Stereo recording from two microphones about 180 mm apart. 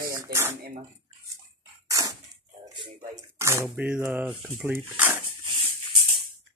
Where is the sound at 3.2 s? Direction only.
15° right (ahead or behind).